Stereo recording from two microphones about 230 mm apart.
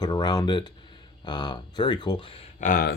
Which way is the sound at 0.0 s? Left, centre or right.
Centre.